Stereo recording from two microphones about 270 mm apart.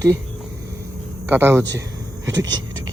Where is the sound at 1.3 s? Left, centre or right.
Centre.